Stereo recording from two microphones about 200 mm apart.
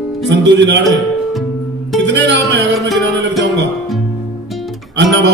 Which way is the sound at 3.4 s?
60° right (ahead or behind).